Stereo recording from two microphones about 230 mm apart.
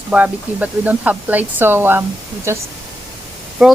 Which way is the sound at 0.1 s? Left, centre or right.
Centre.